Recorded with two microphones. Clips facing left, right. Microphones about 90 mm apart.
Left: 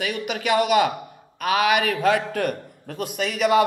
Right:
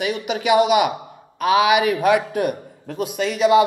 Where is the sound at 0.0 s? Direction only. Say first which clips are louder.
Right 4 dB; 20° right (ahead or behind).